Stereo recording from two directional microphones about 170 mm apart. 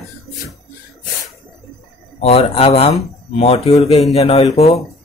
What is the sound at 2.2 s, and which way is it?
Speech, 35° left (ahead or behind).